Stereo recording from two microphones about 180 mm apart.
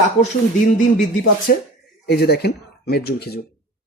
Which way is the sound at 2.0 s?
65° left (ahead or behind).